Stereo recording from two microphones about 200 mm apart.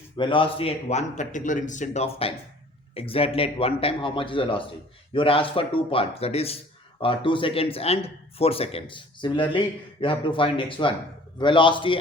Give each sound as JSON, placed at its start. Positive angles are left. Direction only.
{"t": 0.2, "sound": "a man's voice", "side_deg": 25}